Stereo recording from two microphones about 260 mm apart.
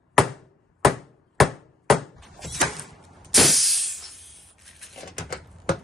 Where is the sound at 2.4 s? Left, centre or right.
Centre.